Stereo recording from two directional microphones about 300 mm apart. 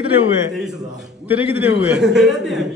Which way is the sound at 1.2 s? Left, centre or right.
Centre.